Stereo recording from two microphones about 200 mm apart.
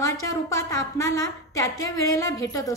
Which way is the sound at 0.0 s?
15° left (ahead or behind).